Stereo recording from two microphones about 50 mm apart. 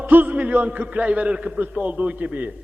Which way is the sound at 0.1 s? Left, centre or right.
Right.